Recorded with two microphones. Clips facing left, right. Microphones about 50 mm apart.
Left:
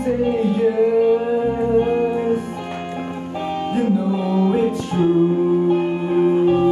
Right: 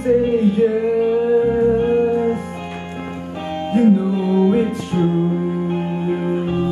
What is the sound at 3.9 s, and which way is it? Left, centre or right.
Music, centre.